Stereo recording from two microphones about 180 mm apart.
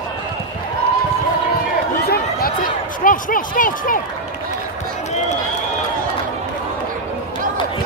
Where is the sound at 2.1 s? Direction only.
55° left (ahead or behind).